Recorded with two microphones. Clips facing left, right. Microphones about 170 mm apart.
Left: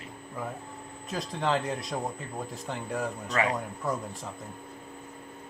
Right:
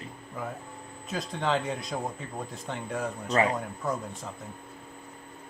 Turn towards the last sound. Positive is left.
turn(degrees=0)  # may be behind; listen again after turning